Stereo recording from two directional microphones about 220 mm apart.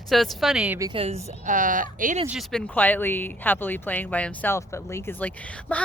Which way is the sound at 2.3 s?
Centre (ahead or behind).